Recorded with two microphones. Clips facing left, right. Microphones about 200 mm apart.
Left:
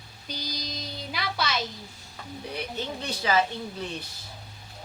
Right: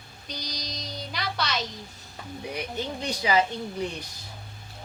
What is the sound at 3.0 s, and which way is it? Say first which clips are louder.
Speech: right 1 dB; 15° right (ahead or behind).